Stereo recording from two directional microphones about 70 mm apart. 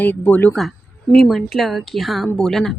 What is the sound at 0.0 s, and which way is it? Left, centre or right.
Speech, left.